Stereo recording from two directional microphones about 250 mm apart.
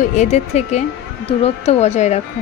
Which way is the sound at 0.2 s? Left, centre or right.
Left.